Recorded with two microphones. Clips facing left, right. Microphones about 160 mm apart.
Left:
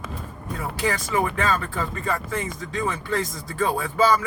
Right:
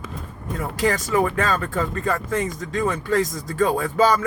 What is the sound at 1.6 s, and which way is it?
Speech, 40° right (ahead or behind).